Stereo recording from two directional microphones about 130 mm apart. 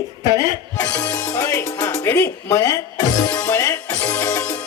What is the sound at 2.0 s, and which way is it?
Speech, 15° left (ahead or behind).